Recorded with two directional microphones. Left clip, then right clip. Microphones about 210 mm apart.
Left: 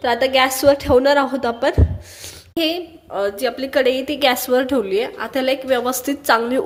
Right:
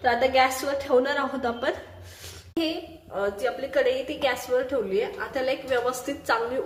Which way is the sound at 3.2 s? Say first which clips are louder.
Left 6 dB; 50° left (ahead or behind).